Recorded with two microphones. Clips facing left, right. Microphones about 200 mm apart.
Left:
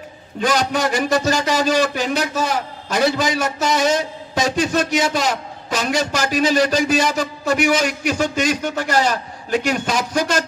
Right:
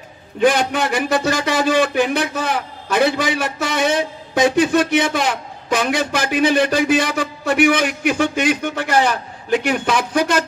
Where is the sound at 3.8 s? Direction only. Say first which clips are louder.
Even; 60° right (ahead or behind).